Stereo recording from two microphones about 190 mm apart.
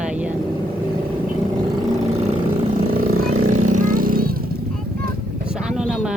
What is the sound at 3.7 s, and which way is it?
Vehicle, 45° right (ahead or behind).